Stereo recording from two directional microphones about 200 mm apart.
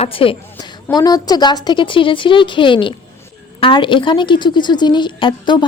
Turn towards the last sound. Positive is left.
turn(degrees=25)  # may be behind; listen again after turning